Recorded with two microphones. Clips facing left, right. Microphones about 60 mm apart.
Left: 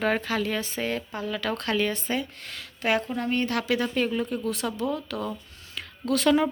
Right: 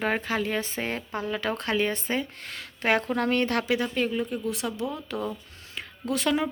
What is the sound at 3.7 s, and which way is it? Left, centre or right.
Speech, centre.